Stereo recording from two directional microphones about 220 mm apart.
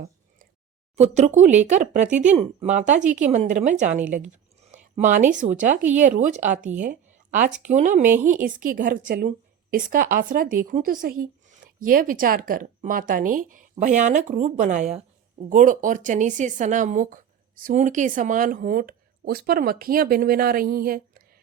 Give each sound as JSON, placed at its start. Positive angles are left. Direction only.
{"t": 0.9, "sound": "a woman's voice", "side_deg": -30}
{"t": 4.7, "sound": "a sound", "side_deg": -35}
{"t": 5.4, "sound": "a woman's voice", "side_deg": -35}